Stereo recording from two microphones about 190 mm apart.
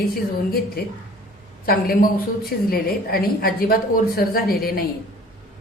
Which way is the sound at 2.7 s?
50° left (ahead or behind).